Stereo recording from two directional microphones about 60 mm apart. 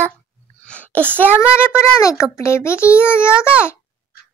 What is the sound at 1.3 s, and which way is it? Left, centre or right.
Child singing, right.